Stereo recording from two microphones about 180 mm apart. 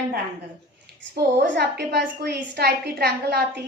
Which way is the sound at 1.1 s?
65° right (ahead or behind).